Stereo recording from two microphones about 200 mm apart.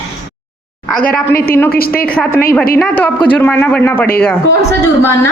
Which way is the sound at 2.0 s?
5° left (ahead or behind).